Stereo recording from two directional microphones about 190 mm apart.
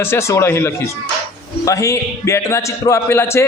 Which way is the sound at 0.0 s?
15° left (ahead or behind).